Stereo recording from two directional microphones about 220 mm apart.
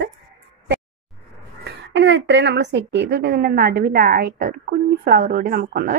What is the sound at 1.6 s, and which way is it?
A woman's voice, 55° right (ahead or behind).